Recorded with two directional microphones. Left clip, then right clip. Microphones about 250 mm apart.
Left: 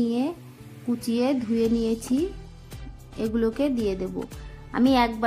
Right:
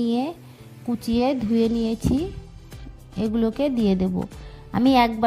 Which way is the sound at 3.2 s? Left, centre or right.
Right.